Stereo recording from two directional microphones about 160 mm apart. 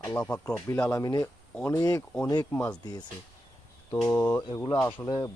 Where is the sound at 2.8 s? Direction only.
25° left (ahead or behind).